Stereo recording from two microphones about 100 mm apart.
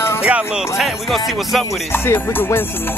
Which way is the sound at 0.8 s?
Centre (ahead or behind).